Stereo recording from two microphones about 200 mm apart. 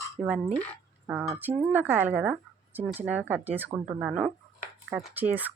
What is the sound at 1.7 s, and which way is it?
Speech, 10° right (ahead or behind).